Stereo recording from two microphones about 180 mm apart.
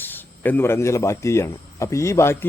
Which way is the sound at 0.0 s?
10° left (ahead or behind).